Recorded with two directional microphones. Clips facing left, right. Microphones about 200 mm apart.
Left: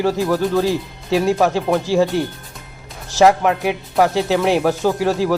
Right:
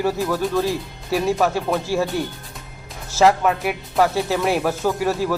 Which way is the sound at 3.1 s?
15° left (ahead or behind).